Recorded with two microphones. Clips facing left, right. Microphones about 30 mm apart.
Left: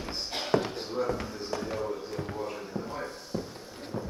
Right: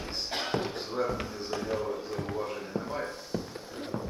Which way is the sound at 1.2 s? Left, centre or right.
Centre.